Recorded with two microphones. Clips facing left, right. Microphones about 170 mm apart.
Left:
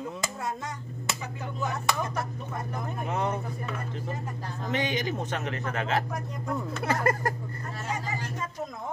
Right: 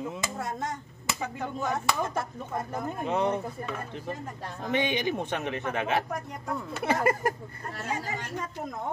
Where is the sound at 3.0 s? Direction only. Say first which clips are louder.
Right 3 dB; 15° right (ahead or behind).